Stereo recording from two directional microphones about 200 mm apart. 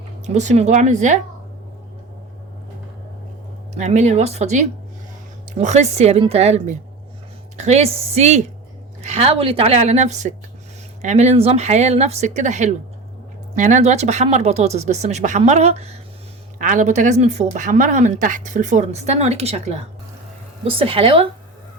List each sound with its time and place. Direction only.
0.3 s speech: 35° right (ahead or behind)
3.8 s a woman's voice: 35° right (ahead or behind)